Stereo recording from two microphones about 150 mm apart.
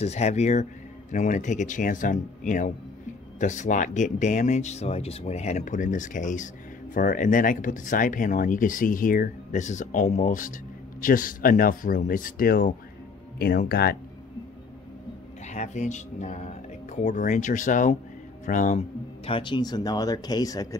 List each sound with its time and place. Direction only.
0.0 s speech: 45° left (ahead or behind); by 12.7 s 75° left (ahead or behind)
13.4 s speech: 90° left
15.4 s speech: 50° left (ahead or behind); by 20.6 s 25° left (ahead or behind)